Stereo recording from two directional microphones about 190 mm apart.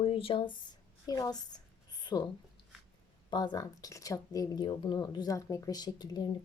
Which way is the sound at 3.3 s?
20° left (ahead or behind).